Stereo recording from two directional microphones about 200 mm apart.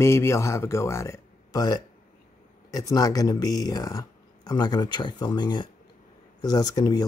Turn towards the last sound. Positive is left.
turn(degrees=20)  # may be behind; listen again after turning